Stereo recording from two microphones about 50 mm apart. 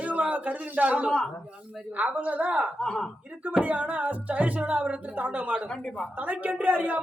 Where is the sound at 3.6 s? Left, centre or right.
Right.